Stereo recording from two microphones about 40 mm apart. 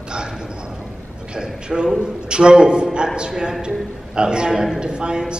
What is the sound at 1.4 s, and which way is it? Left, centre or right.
A man's voice, right.